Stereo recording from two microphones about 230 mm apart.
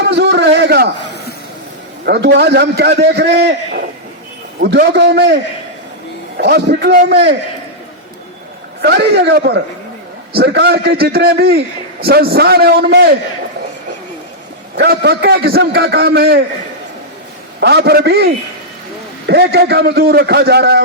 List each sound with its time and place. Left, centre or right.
0.1 s a sound: right
2.0 s a man's voice: right
8.8 s a man's voice: right
14.8 s a man's voice: right
17.6 s a man's voice: right
19.3 s a man's voice: right